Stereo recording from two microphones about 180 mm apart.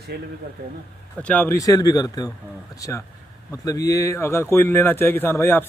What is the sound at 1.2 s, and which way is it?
Speech, 10° left (ahead or behind).